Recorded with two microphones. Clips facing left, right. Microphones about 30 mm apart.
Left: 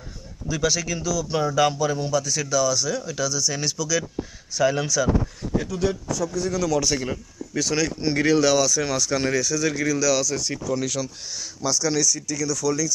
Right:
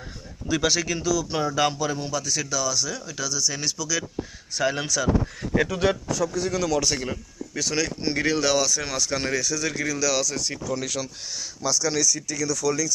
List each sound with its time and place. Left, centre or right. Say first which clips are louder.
0.5 s speech: right 1 dB; centre
1.1 s speech: left 3 dB; centre
4.5 s speech: left 3 dB; right
5.5 s speech: right 2 dB; right
6.1 s speech: even; centre
10.5 s speech: left 3 dB; centre
11.6 s speech: left 1 dB; centre